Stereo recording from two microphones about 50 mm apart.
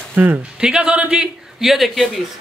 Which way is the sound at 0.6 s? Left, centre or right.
Centre.